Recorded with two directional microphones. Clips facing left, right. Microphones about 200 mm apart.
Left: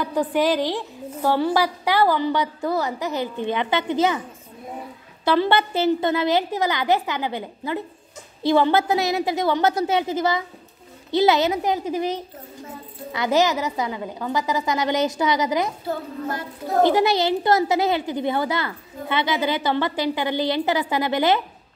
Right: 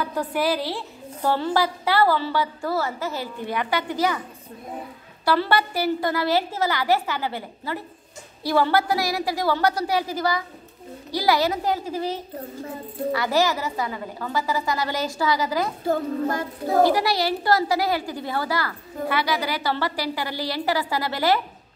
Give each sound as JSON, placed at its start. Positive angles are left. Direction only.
{"t": 0.0, "sound": "a woman's voice", "side_deg": 15}
{"t": 5.2, "sound": "a woman's voice", "side_deg": 20}
{"t": 16.8, "sound": "a woman's voice", "side_deg": 20}